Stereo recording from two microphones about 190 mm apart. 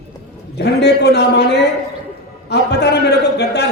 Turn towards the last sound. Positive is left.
turn(degrees=60)  # may be behind; listen again after turning